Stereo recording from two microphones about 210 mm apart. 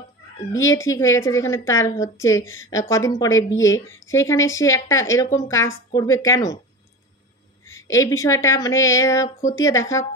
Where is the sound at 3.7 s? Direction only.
15° left (ahead or behind).